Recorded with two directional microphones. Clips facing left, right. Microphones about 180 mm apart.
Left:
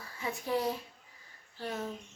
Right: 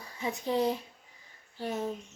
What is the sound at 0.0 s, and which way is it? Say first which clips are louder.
Speech: right 4 dB; 20° right (ahead or behind).